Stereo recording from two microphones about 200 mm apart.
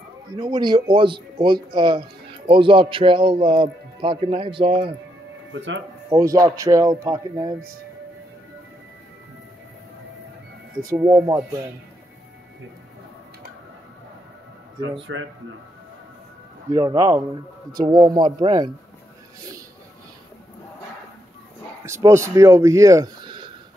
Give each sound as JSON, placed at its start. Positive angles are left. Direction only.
{"t": 0.4, "sound": "speech", "side_deg": -20}
{"t": 6.0, "sound": "speech", "side_deg": -20}
{"t": 11.0, "sound": "speech", "side_deg": -10}
{"t": 15.0, "sound": "speech", "side_deg": -70}
{"t": 16.7, "sound": "speech", "side_deg": -20}
{"t": 21.8, "sound": "speech", "side_deg": -15}